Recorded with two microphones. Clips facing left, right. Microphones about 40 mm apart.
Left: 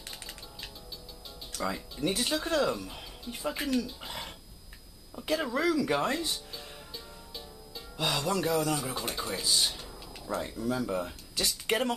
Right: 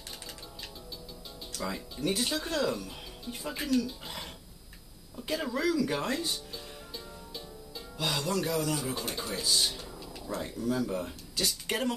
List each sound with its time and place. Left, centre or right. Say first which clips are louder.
1.5 s music: left 3 dB; centre
2.0 s speech: left 1 dB; centre
5.1 s music: left 2 dB; centre
8.0 s speech: left 2 dB; centre
11.6 s speech: left 4 dB; centre